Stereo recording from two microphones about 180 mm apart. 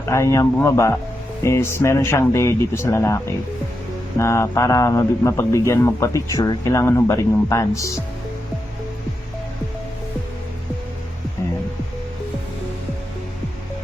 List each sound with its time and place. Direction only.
0.0 s speech: 15° left (ahead or behind)
4.2 s speech: 15° left (ahead or behind)